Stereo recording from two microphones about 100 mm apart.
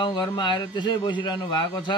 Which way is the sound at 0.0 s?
50° left (ahead or behind).